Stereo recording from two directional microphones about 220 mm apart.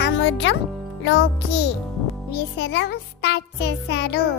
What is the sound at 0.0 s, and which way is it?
Music, 55° left (ahead or behind).